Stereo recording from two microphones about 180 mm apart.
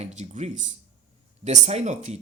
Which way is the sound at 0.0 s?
40° right (ahead or behind).